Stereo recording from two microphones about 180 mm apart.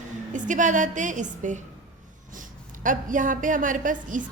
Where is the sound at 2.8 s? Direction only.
45° right (ahead or behind).